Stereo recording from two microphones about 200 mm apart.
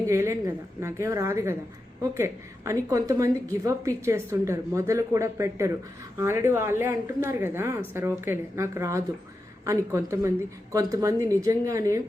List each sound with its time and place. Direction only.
0.0 s a woman's voice: 15° right (ahead or behind)